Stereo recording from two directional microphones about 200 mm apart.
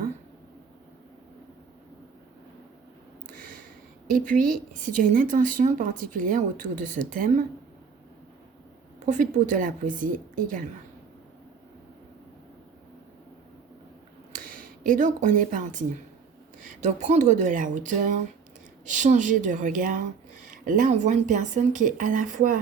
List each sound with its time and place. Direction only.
4.0 s a woman's voice: 40° right (ahead or behind)
9.0 s a woman's voice: 40° right (ahead or behind)
14.3 s a woman's voice: 45° right (ahead or behind)